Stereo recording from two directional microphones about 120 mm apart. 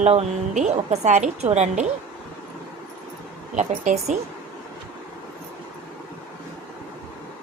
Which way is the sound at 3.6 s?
80° right.